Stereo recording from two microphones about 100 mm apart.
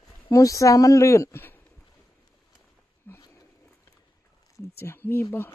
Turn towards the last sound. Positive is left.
turn(degrees=25)  # may be behind; listen again after turning